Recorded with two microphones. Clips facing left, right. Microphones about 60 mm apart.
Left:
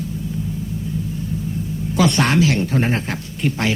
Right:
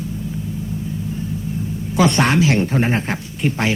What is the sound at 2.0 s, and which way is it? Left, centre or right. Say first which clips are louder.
Speech: right 1 dB; centre.